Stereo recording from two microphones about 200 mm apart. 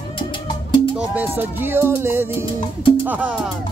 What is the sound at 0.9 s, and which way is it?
Music, 10° right (ahead or behind).